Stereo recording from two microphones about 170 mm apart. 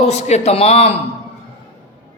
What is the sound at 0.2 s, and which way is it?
Speech, 40° left (ahead or behind).